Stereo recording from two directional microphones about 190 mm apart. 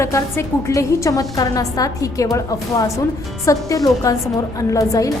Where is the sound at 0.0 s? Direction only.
15° left (ahead or behind).